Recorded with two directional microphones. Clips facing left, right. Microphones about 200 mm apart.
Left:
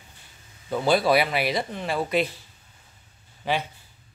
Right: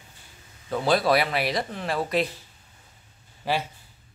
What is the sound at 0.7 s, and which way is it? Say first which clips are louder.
Speech: left 1 dB; centre (ahead or behind).